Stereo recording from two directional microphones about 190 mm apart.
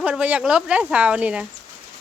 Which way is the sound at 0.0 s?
5° right (ahead or behind).